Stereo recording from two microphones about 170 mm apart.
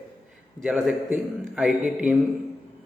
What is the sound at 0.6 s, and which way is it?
A man's voice, 5° right (ahead or behind).